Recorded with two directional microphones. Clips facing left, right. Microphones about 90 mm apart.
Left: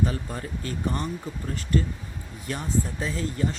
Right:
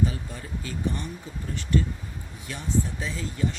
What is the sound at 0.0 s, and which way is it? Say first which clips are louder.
Speech: left 1 dB; 50° left (ahead or behind).